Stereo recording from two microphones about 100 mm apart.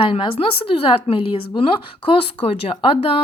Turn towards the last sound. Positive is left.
turn(degrees=65)  # may be behind; listen again after turning